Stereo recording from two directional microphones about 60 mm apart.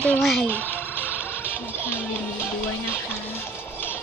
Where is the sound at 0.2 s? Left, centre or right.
Centre.